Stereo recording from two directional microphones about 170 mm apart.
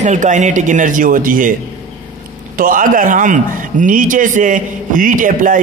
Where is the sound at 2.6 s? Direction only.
55° right (ahead or behind).